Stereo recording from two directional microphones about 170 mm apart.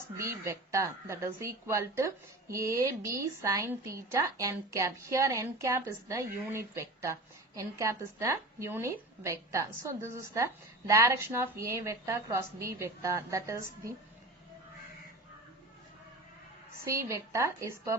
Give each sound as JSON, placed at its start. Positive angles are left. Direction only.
{"t": 0.2, "sound": "a woman's voice", "side_deg": -15}
{"t": 17.1, "sound": "a woman's voice", "side_deg": -20}